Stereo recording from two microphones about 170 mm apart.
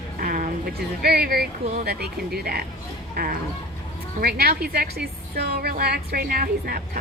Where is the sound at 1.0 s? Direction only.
70° right (ahead or behind).